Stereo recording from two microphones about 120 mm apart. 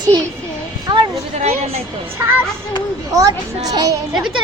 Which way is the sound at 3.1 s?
30° right (ahead or behind).